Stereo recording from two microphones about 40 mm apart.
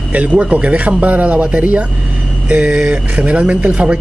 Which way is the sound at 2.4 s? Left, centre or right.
Right.